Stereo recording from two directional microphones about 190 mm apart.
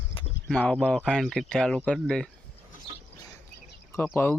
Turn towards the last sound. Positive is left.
turn(degrees=10)  # may be behind; listen again after turning